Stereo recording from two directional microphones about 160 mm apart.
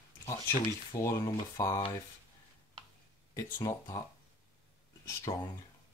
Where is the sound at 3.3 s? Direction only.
20° left (ahead or behind).